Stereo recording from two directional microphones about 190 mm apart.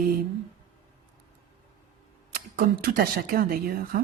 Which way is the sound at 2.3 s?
50° right (ahead or behind).